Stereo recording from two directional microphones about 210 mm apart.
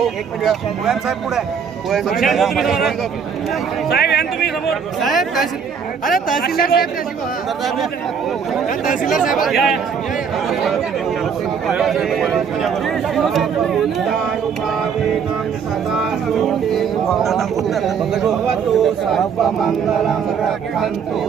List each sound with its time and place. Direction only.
0.0 s speech: centre (ahead or behind)
3.8 s speech: 50° left (ahead or behind)
4.7 s speech: centre (ahead or behind)
6.3 s speech: 45° left (ahead or behind)
9.0 s speech: centre (ahead or behind)
15.9 s speech: centre (ahead or behind)